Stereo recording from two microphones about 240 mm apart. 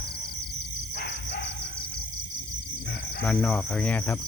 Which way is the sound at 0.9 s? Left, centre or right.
Left.